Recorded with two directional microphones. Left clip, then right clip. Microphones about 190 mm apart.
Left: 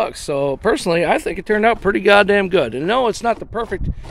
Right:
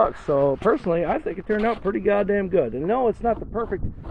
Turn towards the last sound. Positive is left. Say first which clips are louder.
# left 4 dB
turn(degrees=55)  # may be behind; listen again after turning